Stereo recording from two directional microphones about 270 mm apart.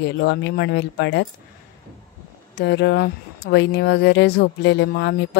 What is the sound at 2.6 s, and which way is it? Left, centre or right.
Speech, left.